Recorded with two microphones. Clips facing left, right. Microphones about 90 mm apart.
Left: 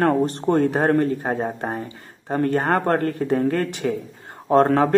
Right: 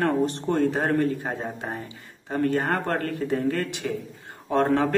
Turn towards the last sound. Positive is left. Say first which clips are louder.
# left 6 dB
turn(degrees=45)  # may be behind; listen again after turning